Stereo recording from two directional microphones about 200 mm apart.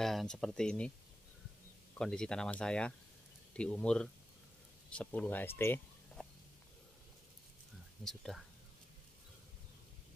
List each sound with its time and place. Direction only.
0.0 s speech: centre (ahead or behind)
2.0 s speech: 5° left (ahead or behind)
8.0 s speech: centre (ahead or behind)